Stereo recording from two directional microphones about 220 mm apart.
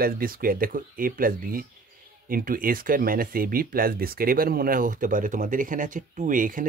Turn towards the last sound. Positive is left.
turn(degrees=-35)  # may be behind; listen again after turning